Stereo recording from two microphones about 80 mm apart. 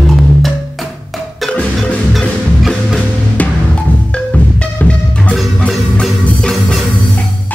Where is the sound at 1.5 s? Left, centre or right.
Centre.